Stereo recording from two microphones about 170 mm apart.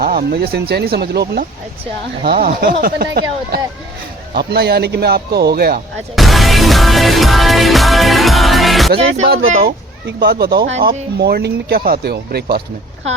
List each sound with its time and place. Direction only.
0.0 s a man's voice: 65° right (ahead or behind)
6.1 s music: centre (ahead or behind)
9.5 s speech: 60° right (ahead or behind)